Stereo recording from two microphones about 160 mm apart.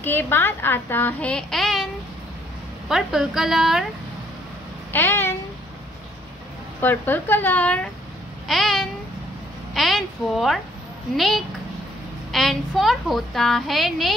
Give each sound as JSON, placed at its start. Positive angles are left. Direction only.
{"t": 0.0, "sound": "a woman's voice", "side_deg": 15}
{"t": 2.9, "sound": "a woman's voice", "side_deg": -5}
{"t": 4.9, "sound": "a woman's voice", "side_deg": 15}
{"t": 6.8, "sound": "a woman's voice", "side_deg": 10}